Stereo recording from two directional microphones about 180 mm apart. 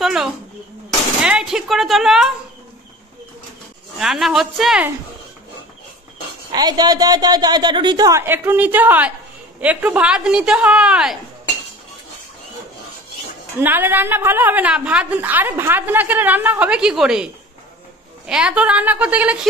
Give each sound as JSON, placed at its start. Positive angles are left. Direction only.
{"t": 0.0, "sound": "a child's voice", "side_deg": -5}
{"t": 4.0, "sound": "a woman's voice", "side_deg": 0}
{"t": 6.5, "sound": "a woman's voice", "side_deg": -20}
{"t": 13.6, "sound": "a woman's voice", "side_deg": -10}